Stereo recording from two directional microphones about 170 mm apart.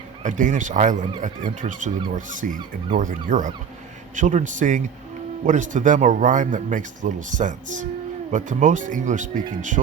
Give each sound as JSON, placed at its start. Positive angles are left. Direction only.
{"t": 0.2, "sound": "speech", "side_deg": -50}